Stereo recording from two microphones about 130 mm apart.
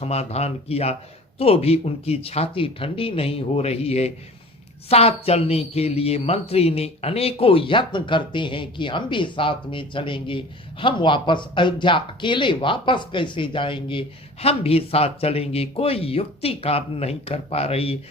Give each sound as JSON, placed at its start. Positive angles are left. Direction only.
{"t": 0.0, "sound": "speech", "side_deg": 55}